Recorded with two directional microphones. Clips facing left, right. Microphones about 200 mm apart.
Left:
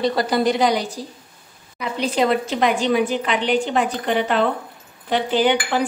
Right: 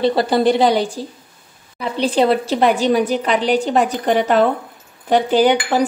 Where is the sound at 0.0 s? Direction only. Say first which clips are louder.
Right 4 dB; 30° right (ahead or behind).